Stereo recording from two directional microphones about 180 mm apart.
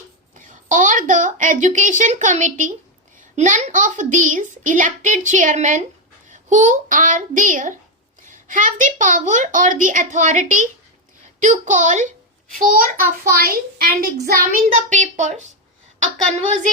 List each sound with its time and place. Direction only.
0.3 s a woman's voice: 45° right (ahead or behind)
14.8 s a woman's voice: 45° right (ahead or behind)